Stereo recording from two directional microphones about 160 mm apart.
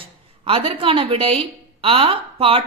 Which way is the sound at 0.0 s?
35° right (ahead or behind).